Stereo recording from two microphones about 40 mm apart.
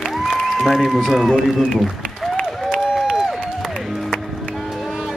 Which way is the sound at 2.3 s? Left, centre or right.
Centre.